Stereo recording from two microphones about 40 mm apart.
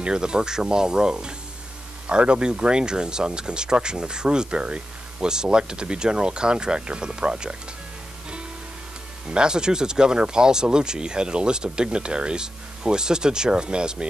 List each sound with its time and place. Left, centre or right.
0.0 s speech: centre
9.3 s speech: centre